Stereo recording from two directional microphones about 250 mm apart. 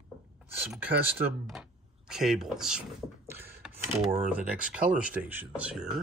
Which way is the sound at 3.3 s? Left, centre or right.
Centre.